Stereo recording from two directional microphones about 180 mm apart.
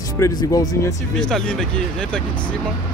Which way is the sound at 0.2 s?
20° left (ahead or behind).